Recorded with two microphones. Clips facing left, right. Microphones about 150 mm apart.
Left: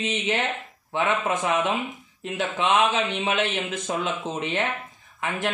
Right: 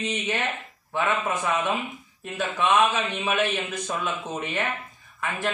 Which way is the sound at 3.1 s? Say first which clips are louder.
Even; 25° left (ahead or behind).